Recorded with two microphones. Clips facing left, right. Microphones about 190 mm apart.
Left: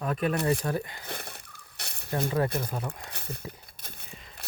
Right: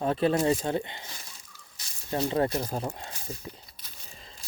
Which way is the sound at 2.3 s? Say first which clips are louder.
Right 2 dB; 25° right (ahead or behind).